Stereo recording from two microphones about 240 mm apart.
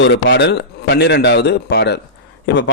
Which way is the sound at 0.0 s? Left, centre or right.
Left.